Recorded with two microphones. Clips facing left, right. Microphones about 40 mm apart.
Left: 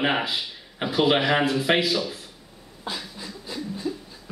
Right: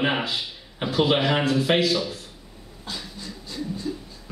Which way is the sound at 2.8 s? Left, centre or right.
Left.